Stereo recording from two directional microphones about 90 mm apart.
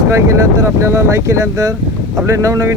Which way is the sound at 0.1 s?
30° right (ahead or behind).